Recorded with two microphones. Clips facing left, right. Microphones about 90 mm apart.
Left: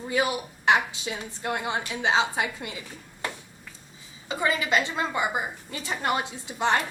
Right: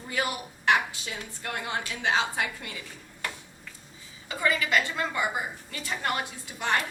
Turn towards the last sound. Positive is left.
turn(degrees=25)  # may be behind; listen again after turning